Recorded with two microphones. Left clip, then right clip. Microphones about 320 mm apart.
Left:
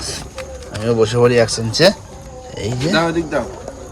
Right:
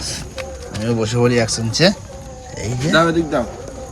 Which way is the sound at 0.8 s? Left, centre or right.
Left.